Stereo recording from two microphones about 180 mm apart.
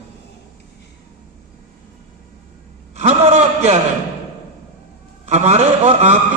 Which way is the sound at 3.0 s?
35° right (ahead or behind).